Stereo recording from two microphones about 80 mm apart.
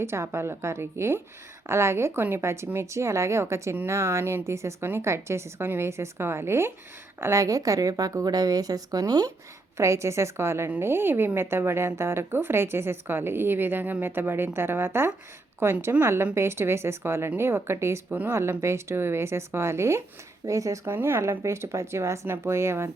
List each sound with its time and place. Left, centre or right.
0.0 s a woman's voice: right
9.7 s a woman's voice: right
20.8 s speech: right